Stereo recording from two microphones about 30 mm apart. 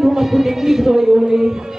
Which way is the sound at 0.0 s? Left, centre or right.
Centre.